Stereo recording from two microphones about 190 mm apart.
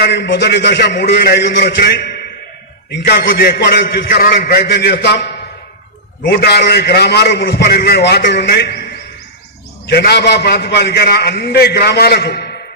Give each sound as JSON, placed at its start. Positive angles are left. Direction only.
{"t": 0.1, "sound": "a man's voice", "side_deg": 65}
{"t": 6.3, "sound": "a man's voice", "side_deg": 60}